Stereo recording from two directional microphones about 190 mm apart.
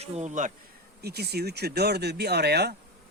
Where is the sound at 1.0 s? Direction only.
55° right (ahead or behind).